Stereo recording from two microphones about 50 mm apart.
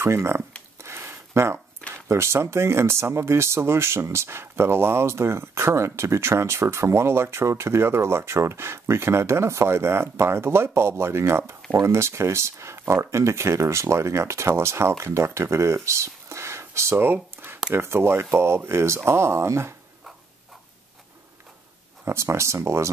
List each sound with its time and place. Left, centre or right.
0.0 s speech: right
0.8 s a sound: right
1.8 s a sound: left
2.0 s speech: right
11.8 s speech: right
17.0 s speech: right
22.0 s speech: right